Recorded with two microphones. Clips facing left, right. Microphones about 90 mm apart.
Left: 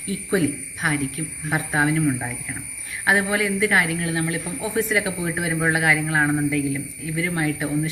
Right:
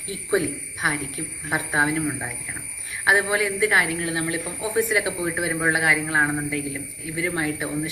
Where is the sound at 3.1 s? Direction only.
20° right (ahead or behind).